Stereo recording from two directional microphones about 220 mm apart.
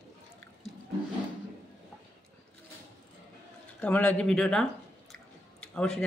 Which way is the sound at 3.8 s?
5° left (ahead or behind).